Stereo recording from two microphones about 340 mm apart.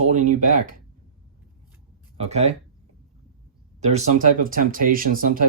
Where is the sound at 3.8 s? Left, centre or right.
Centre.